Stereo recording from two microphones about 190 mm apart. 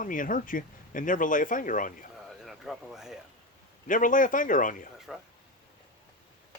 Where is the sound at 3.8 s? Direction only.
45° left (ahead or behind).